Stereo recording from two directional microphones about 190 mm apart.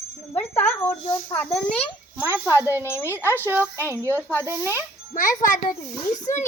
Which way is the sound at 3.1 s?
10° right (ahead or behind).